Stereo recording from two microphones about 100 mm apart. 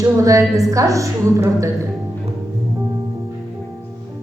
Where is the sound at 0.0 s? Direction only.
35° right (ahead or behind).